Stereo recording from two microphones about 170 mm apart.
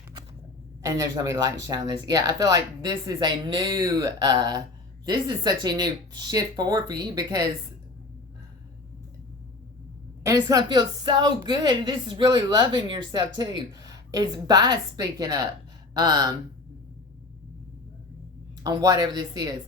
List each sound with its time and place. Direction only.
0.8 s speech: 20° right (ahead or behind)
10.2 s speech: 20° right (ahead or behind)
18.6 s speech: 20° right (ahead or behind)